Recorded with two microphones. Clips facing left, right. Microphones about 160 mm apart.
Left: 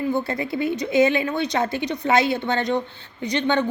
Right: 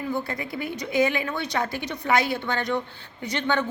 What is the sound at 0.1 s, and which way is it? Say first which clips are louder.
A woman's voice: left 5 dB; 25° left (ahead or behind).